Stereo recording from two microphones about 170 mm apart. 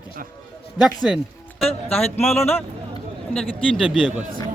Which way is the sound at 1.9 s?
10° left (ahead or behind).